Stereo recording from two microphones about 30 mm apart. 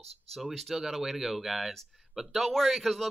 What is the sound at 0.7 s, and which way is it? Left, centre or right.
Speech, centre.